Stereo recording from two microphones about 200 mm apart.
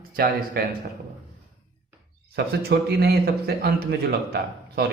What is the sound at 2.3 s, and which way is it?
A man's voice, 55° right (ahead or behind).